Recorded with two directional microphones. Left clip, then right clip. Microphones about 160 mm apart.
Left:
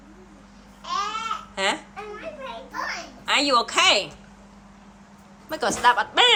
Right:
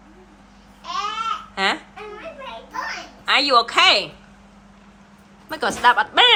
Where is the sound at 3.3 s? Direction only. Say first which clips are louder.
Right 4 dB; 10° left (ahead or behind).